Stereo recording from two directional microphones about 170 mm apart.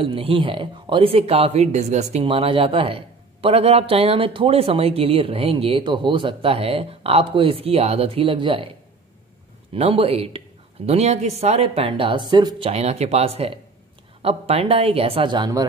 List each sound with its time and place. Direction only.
0.0 s speech: 30° right (ahead or behind)
9.7 s speech: 35° right (ahead or behind)